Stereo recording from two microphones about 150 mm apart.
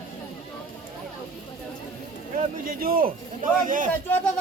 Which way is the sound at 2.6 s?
75° right (ahead or behind).